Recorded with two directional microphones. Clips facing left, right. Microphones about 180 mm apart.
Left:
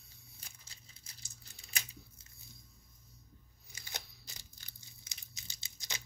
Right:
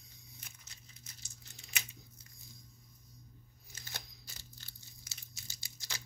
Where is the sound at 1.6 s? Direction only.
35° left (ahead or behind).